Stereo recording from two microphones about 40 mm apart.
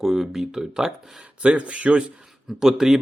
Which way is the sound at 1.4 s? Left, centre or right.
Right.